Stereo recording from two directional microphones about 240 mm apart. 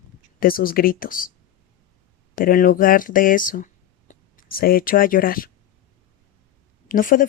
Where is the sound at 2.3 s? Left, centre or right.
Left.